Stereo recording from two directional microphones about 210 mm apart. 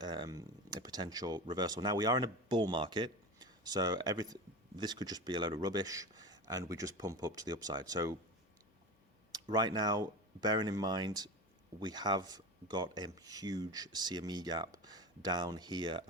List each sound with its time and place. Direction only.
0.0 s speech: 20° right (ahead or behind)
9.3 s speech: 20° right (ahead or behind)